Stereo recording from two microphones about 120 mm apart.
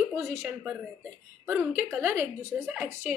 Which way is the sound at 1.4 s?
15° right (ahead or behind).